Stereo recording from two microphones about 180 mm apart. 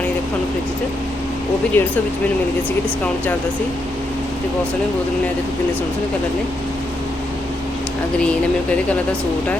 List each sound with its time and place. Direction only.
1.7 s speech: 10° left (ahead or behind)